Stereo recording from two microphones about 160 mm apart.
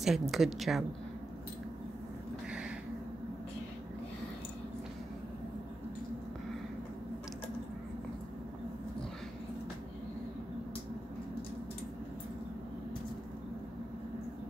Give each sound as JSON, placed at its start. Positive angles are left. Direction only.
{"t": 0.0, "sound": "a woman's voice", "side_deg": 0}